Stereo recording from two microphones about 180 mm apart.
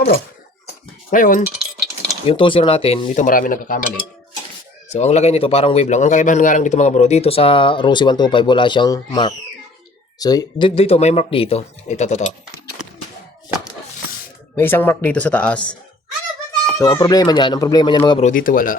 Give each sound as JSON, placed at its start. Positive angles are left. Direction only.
{"t": 1.1, "sound": "speech", "side_deg": 50}
{"t": 2.2, "sound": "a man's voice", "side_deg": 30}
{"t": 3.2, "sound": "speech", "side_deg": 50}
{"t": 4.9, "sound": "a man's voice", "side_deg": 40}
{"t": 10.8, "sound": "a man's voice", "side_deg": 35}
{"t": 14.5, "sound": "speech", "side_deg": 10}
{"t": 16.7, "sound": "speech", "side_deg": 20}
{"t": 18.2, "sound": "speech", "side_deg": 45}